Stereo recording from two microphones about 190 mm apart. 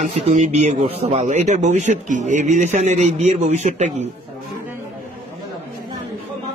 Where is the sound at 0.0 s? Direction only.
40° right (ahead or behind).